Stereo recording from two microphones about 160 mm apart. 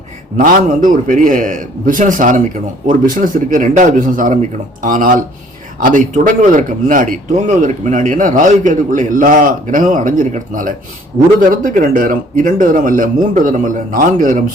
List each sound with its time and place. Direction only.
0.3 s speech: 60° right (ahead or behind)